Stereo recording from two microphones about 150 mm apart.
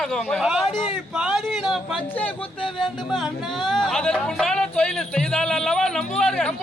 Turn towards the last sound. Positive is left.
turn(degrees=5)  # may be behind; listen again after turning